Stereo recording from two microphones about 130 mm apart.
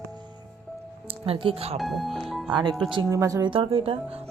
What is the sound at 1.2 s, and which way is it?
Speech, 45° right (ahead or behind).